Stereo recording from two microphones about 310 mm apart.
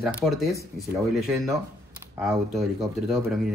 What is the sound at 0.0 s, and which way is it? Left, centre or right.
Speech, centre.